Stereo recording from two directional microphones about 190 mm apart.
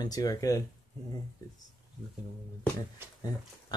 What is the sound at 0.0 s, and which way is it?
Speech, 20° left (ahead or behind).